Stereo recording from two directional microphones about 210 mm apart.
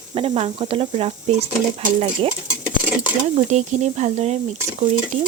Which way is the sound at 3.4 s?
35° right (ahead or behind).